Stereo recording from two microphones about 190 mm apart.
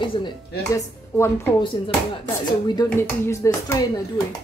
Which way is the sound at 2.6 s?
20° left (ahead or behind).